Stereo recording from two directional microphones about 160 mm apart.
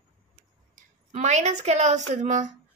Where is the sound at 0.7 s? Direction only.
50° right (ahead or behind).